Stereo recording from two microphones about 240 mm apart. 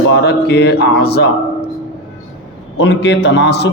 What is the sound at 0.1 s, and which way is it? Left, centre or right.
A man's voice, left.